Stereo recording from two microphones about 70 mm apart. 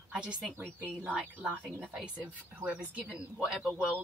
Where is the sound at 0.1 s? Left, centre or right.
Centre.